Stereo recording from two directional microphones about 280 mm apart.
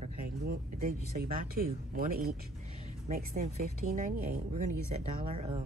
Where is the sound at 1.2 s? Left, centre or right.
Right.